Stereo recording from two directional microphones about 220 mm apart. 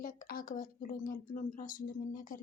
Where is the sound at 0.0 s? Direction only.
40° left (ahead or behind).